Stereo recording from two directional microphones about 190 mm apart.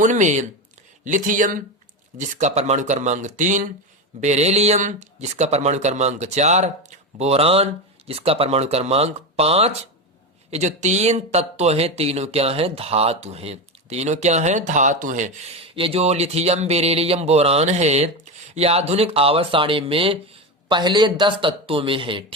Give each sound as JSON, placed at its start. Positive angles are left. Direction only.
{"t": 0.0, "sound": "a man's voice", "side_deg": -40}